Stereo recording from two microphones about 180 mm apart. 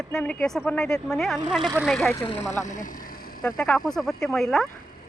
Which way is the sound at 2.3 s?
15° left (ahead or behind).